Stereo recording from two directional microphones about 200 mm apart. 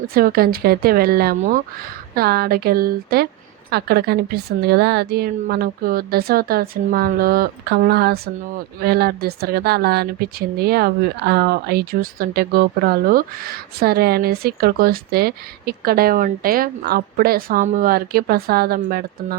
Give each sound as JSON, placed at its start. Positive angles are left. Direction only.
{"t": 0.1, "sound": "a woman's voice", "side_deg": -45}